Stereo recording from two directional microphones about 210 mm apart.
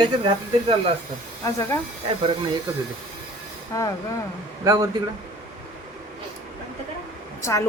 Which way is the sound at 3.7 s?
15° left (ahead or behind).